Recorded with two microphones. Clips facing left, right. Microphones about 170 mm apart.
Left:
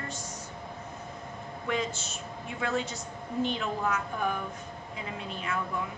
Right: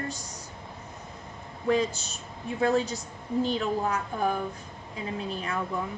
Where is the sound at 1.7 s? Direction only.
35° right (ahead or behind).